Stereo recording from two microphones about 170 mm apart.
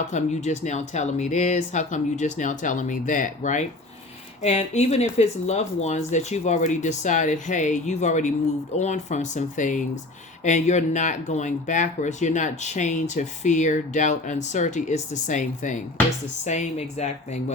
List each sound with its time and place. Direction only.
0.1 s speech: 45° left (ahead or behind)